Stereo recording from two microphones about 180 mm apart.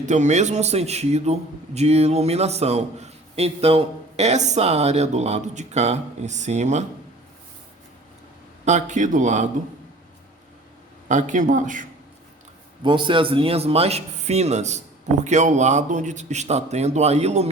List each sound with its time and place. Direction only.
0.0 s a man's voice: 40° right (ahead or behind)
8.6 s a man's voice: 40° right (ahead or behind)
11.1 s speech: 45° right (ahead or behind)
12.8 s a man's voice: 25° right (ahead or behind)